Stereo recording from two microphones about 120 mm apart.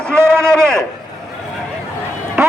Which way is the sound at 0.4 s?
5° left (ahead or behind).